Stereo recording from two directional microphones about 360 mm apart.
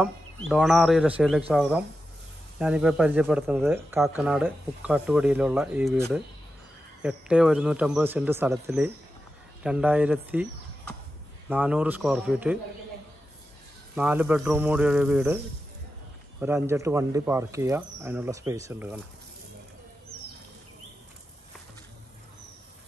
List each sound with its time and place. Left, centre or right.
0.5 s speech: centre
13.9 s speech: centre
16.3 s speech: centre